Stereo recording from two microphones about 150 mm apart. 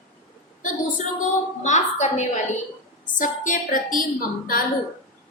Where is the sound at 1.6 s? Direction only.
50° left (ahead or behind).